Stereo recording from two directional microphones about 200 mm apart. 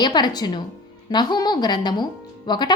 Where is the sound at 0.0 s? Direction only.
20° left (ahead or behind).